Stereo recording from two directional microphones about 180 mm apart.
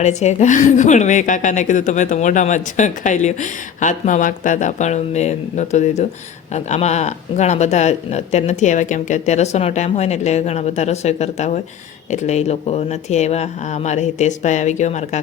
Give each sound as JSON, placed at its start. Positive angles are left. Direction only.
{"t": 0.0, "sound": "a woman's voice", "side_deg": 40}